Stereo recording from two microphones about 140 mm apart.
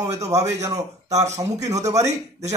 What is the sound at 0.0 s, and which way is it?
A man's voice, 25° right (ahead or behind).